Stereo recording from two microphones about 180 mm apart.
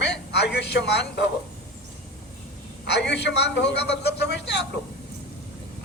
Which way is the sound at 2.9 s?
70° left (ahead or behind).